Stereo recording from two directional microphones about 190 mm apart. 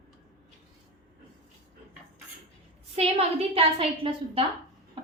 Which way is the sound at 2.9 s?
35° right (ahead or behind).